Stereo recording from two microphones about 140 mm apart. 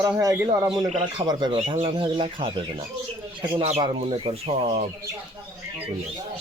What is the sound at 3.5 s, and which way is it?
Speech, 50° right (ahead or behind).